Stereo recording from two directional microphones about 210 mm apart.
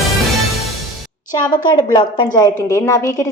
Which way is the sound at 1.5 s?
20° left (ahead or behind).